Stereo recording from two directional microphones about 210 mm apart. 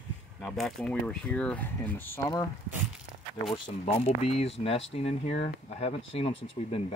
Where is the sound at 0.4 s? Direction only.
Centre (ahead or behind).